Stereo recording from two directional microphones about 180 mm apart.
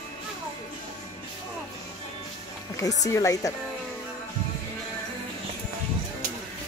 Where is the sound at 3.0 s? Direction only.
20° left (ahead or behind).